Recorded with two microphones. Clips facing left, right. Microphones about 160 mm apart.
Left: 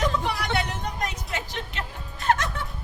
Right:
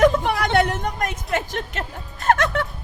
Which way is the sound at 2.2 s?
50° right (ahead or behind).